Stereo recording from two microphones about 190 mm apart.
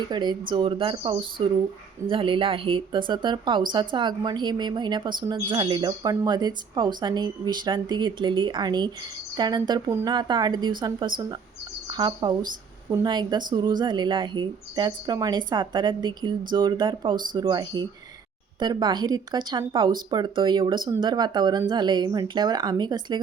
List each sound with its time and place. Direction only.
0.1 s speech: 25° right (ahead or behind)